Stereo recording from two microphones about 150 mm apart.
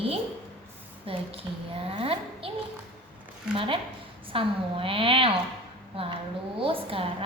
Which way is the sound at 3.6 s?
35° right (ahead or behind).